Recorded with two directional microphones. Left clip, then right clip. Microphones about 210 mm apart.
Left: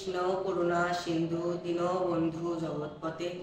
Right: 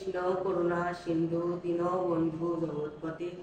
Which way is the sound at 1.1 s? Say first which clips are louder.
Right 1 dB; 20° left (ahead or behind).